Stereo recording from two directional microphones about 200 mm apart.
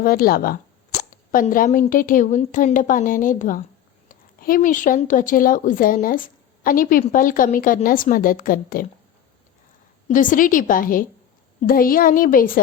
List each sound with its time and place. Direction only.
0.0 s a woman's voice: 45° left (ahead or behind)
10.1 s a woman's voice: 40° left (ahead or behind)